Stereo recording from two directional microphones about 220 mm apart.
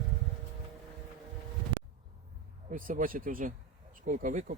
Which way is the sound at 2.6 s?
35° right (ahead or behind).